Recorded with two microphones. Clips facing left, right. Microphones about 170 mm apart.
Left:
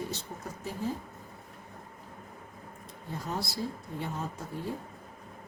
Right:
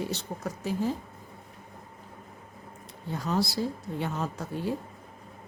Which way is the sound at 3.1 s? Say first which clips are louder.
Right 7 dB; 85° right.